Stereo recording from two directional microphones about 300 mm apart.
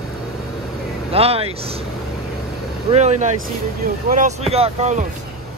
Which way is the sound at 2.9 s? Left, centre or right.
Right.